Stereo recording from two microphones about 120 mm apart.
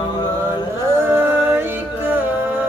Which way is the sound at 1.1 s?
20° right (ahead or behind).